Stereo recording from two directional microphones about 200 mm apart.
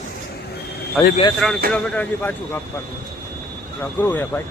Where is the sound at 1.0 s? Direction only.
5° left (ahead or behind).